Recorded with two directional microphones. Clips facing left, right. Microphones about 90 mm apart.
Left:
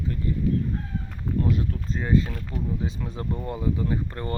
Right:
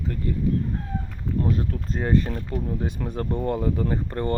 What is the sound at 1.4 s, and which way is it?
Speech, 40° right (ahead or behind).